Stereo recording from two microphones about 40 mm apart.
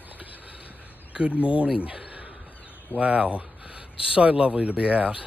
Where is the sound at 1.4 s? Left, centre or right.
Right.